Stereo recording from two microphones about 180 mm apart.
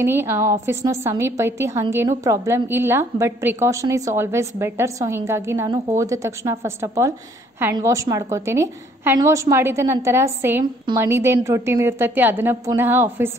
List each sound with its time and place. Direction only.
0.0 s a woman's voice: 15° right (ahead or behind)